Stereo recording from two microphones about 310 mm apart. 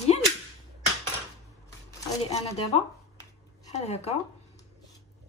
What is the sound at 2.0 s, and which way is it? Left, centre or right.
Speech, centre.